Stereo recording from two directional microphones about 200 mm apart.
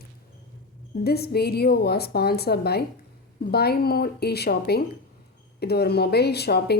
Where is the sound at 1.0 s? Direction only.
50° left (ahead or behind).